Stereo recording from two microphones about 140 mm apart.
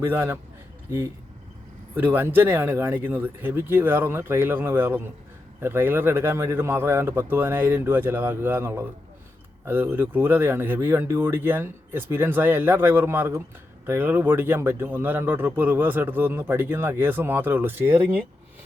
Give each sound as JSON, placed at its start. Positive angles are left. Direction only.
{"t": 0.0, "sound": "speech", "side_deg": -15}